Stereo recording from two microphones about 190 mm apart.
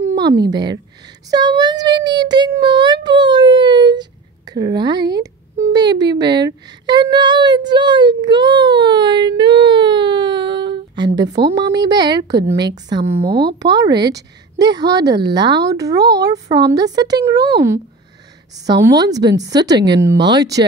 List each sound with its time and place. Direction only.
0.1 s a woman's voice: 20° right (ahead or behind)